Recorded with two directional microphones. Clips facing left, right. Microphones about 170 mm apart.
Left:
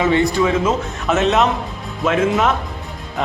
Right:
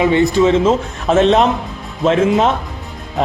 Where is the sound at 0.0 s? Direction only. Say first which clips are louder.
Right 4 dB; 20° right (ahead or behind).